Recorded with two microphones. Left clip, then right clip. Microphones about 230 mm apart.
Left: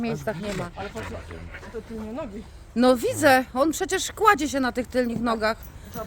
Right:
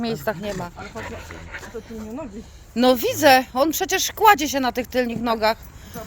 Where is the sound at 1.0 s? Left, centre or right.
Right.